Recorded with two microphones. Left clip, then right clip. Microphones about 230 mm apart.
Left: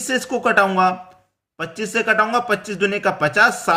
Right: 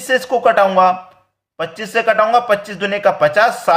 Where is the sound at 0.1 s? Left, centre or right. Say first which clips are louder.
Right 5 dB; centre.